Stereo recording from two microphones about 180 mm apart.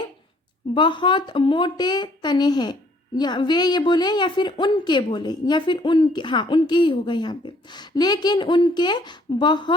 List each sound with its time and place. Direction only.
0.7 s a woman's voice: 25° left (ahead or behind)